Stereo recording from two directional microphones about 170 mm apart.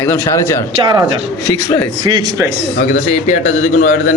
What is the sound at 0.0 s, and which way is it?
Speech, 15° left (ahead or behind).